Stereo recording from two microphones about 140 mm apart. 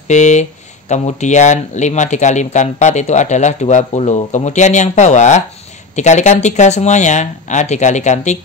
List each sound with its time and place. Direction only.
0.1 s speech: 55° left (ahead or behind)